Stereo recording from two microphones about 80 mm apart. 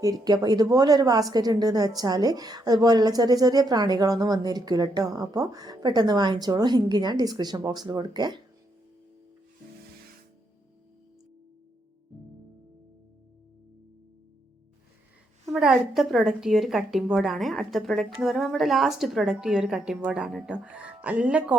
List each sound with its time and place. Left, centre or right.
0.0 s a woman's voice: right
15.5 s a woman's voice: centre